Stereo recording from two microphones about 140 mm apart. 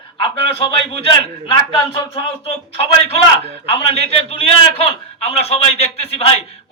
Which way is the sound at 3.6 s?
45° left (ahead or behind).